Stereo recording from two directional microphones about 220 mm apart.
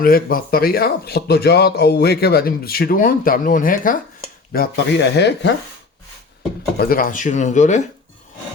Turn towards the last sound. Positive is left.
turn(degrees=35)  # may be behind; listen again after turning